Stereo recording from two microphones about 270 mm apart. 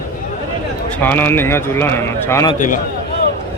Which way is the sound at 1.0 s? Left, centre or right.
Centre.